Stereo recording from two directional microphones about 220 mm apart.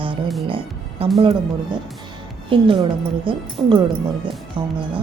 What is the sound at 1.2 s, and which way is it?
A woman's voice, 25° right (ahead or behind).